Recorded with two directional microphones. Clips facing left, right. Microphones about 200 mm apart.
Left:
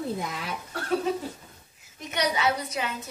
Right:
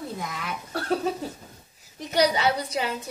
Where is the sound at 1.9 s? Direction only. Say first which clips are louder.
Right 5 dB; 35° right (ahead or behind).